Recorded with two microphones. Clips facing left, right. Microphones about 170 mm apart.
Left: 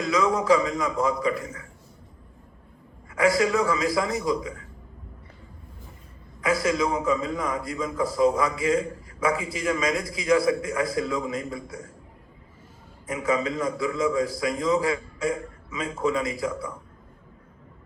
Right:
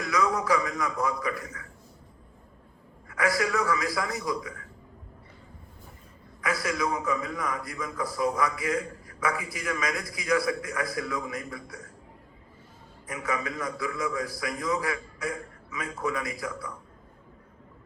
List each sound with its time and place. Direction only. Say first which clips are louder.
0.0 s a man's voice: left 4 dB; 20° left (ahead or behind)
3.1 s a man's voice: left 6 dB; 20° left (ahead or behind)
6.4 s a man's voice: left 5 dB; 25° left (ahead or behind)
13.1 s a man's voice: left 6 dB; 25° left (ahead or behind)